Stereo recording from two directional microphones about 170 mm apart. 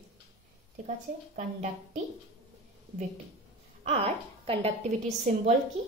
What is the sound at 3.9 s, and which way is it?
Speech, 35° right (ahead or behind).